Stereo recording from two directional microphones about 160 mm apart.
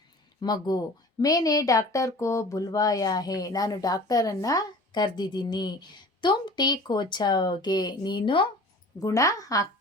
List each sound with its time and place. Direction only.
0.4 s speech: 25° left (ahead or behind)
9.0 s speech: 20° left (ahead or behind)